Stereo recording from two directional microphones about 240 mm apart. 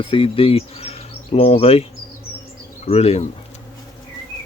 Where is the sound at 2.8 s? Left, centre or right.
Left.